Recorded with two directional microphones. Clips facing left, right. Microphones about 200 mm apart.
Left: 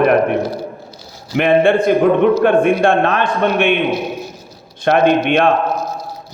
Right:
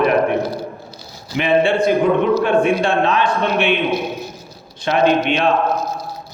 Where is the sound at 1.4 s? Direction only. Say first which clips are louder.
Left 3 dB; 55° left (ahead or behind).